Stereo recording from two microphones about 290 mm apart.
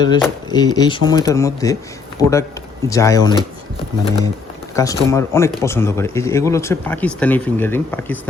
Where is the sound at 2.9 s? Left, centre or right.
Centre.